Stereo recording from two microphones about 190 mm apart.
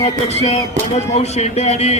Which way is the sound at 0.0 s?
35° left (ahead or behind).